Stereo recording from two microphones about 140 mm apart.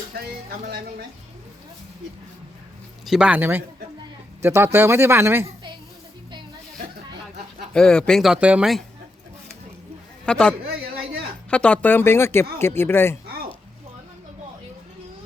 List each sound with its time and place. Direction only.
3.1 s speech: 10° right (ahead or behind)
7.7 s speech: 5° left (ahead or behind)
10.2 s speech: 5° left (ahead or behind)
11.5 s speech: 10° left (ahead or behind)